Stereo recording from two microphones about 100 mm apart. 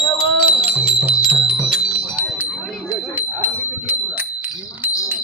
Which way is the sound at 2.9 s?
20° right (ahead or behind).